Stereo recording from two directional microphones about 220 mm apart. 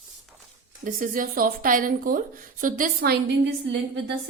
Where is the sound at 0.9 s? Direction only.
35° right (ahead or behind).